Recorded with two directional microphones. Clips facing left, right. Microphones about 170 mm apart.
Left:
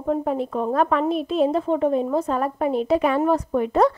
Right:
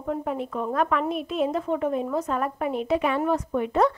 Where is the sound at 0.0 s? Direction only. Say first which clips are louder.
Left 5 dB; 35° left (ahead or behind).